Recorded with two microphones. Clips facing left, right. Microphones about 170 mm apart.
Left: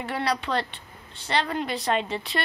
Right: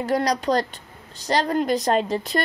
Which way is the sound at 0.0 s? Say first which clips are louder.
Right 6 dB; 40° right (ahead or behind).